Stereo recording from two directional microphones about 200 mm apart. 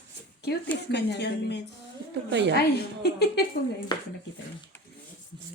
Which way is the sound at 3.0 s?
55° left (ahead or behind).